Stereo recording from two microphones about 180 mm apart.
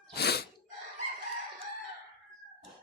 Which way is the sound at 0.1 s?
65° left (ahead or behind).